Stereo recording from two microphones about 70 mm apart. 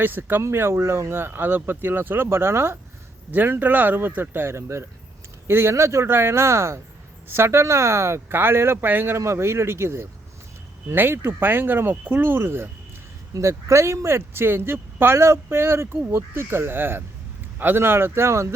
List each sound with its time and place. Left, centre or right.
0.0 s speech: right
13.3 s speech: right